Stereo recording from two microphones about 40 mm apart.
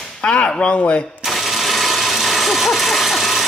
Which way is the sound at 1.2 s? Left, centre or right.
Centre.